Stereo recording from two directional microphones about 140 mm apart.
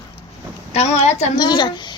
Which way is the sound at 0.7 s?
50° left (ahead or behind).